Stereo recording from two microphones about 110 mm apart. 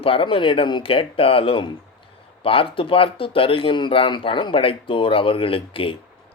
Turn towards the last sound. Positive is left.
turn(degrees=55)  # may be behind; listen again after turning